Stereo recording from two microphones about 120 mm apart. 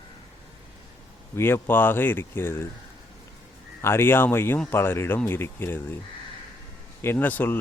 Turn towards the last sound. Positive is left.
turn(degrees=15)  # may be behind; listen again after turning